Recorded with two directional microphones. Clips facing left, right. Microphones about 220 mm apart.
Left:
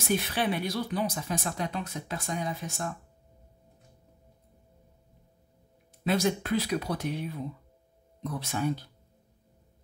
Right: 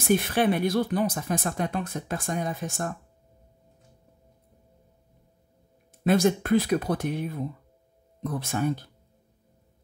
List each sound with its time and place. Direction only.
0.1 s speech: 50° right (ahead or behind)
6.0 s speech: 50° right (ahead or behind)